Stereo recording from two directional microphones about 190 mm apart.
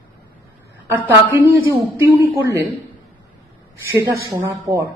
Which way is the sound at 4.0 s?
15° right (ahead or behind).